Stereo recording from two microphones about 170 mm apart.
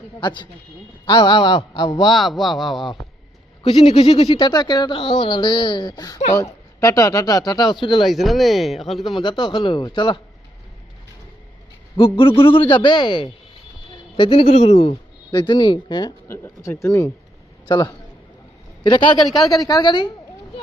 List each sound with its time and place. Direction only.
0.2 s speech: 25° left (ahead or behind)
2.0 s speech: centre (ahead or behind)
3.6 s speech: 35° left (ahead or behind)
8.0 s speech: centre (ahead or behind)
9.1 s speech: 30° left (ahead or behind)
11.9 s a man's voice: 30° left (ahead or behind)
14.4 s speech: 45° left (ahead or behind); by 20.1 s 25° left (ahead or behind)